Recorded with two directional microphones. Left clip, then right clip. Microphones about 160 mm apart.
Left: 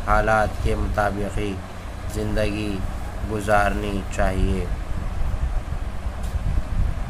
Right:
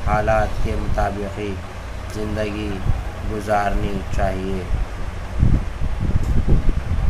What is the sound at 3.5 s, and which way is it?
Speech, 50° left (ahead or behind).